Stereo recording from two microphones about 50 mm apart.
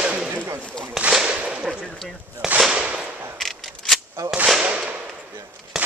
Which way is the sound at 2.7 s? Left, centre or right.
Centre.